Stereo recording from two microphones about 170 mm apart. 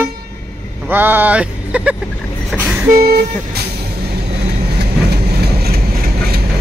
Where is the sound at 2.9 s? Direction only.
65° right (ahead or behind).